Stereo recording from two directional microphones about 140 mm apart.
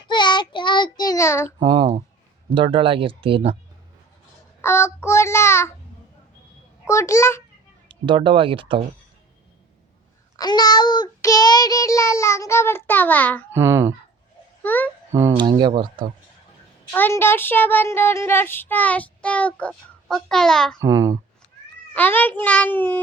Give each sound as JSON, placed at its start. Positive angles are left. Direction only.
{"t": 0.1, "sound": "child singing", "side_deg": 35}
{"t": 1.5, "sound": "a sound", "side_deg": -30}
{"t": 2.5, "sound": "speech", "side_deg": -35}
{"t": 4.6, "sound": "child singing", "side_deg": 20}
{"t": 6.8, "sound": "child singing", "side_deg": 20}
{"t": 7.9, "sound": "speech", "side_deg": -35}
{"t": 10.3, "sound": "child singing", "side_deg": 30}
{"t": 13.5, "sound": "speech", "side_deg": -20}
{"t": 14.6, "sound": "a child's voice", "side_deg": 15}
{"t": 15.4, "sound": "speech", "side_deg": -35}
{"t": 16.9, "sound": "speech", "side_deg": 15}
{"t": 20.8, "sound": "speech", "side_deg": -20}
{"t": 21.9, "sound": "speech", "side_deg": 10}